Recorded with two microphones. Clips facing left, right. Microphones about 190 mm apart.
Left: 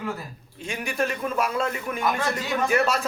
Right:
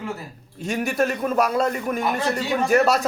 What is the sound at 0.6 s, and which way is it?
A man's voice, 45° right (ahead or behind).